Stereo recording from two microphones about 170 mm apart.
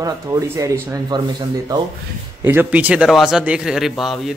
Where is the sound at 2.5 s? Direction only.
10° right (ahead or behind).